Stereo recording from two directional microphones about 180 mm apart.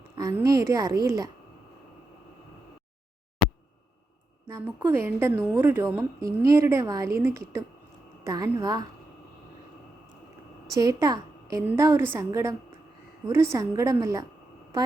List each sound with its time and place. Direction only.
0.2 s speech: 20° right (ahead or behind)
4.4 s a woman's voice: 15° right (ahead or behind)
10.8 s a woman's voice: 20° right (ahead or behind)